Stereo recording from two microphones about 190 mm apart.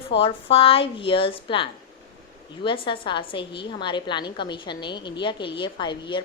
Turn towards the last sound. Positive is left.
turn(degrees=25)  # may be behind; listen again after turning